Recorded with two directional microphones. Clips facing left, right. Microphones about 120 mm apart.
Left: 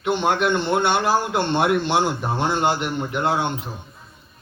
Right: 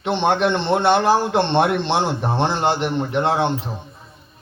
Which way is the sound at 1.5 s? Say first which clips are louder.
Right 1 dB; 5° left (ahead or behind).